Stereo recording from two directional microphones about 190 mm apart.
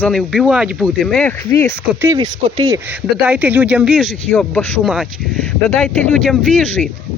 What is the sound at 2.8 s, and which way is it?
Speech, 10° right (ahead or behind).